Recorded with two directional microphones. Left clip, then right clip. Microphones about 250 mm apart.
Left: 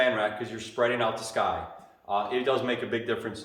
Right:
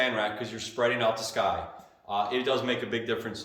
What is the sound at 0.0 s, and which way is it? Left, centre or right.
A man's voice, centre.